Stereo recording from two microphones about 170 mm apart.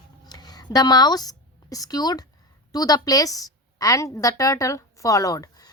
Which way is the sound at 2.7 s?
20° left (ahead or behind).